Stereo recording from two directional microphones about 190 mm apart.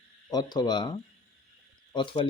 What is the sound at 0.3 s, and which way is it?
Speech, 20° left (ahead or behind).